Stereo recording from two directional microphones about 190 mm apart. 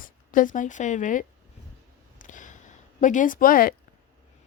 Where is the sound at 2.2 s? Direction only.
40° left (ahead or behind).